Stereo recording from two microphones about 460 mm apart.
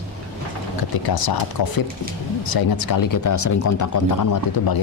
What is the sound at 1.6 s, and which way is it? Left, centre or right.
Speech, left.